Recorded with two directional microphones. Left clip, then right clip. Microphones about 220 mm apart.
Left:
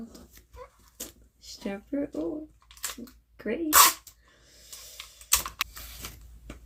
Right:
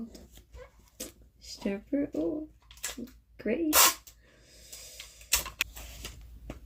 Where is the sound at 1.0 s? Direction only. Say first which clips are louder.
Even; 10° right (ahead or behind).